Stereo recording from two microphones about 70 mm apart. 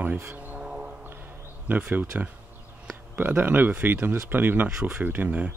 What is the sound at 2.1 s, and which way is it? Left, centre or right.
Speech, centre.